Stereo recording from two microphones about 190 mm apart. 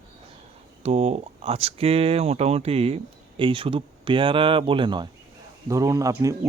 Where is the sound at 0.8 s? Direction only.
35° right (ahead or behind).